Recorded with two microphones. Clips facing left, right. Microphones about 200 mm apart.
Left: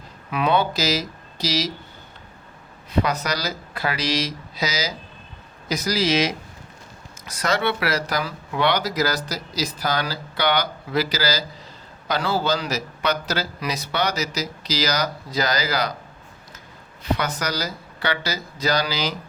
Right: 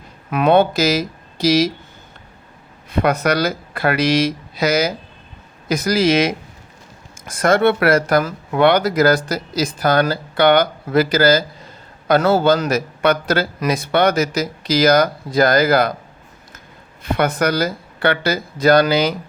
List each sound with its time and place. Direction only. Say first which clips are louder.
0.3 s speech: right 7 dB; 50° right (ahead or behind)
2.9 s speech: right 6 dB; 55° right (ahead or behind)
17.0 s speech: right 7 dB; 55° right (ahead or behind)